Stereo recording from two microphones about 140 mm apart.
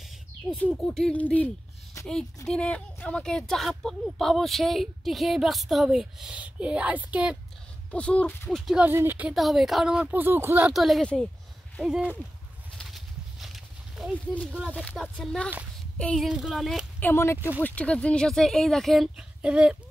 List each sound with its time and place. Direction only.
0.7 s speech: 5° left (ahead or behind)
2.0 s a sound: 20° left (ahead or behind)
2.4 s speech: 5° left (ahead or behind)
7.9 s speech: 10° left (ahead or behind)
8.7 s speech: 15° right (ahead or behind)
9.3 s speech: centre (ahead or behind)
10.7 s speech: centre (ahead or behind)
12.7 s a sound: centre (ahead or behind)
14.7 s speech: 5° left (ahead or behind)
16.3 s speech: 5° right (ahead or behind)
17.0 s speech: 20° left (ahead or behind); by 19.8 s 5° right (ahead or behind)